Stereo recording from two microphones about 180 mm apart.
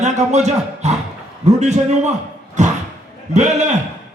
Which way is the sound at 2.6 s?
40° right (ahead or behind).